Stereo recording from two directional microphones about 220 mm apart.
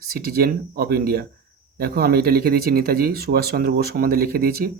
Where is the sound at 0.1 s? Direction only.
45° right (ahead or behind).